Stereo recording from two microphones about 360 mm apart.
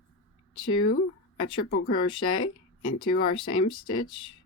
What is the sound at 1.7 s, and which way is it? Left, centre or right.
Speech, left.